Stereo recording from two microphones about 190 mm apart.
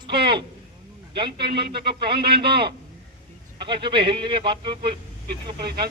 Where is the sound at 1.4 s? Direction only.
60° right (ahead or behind).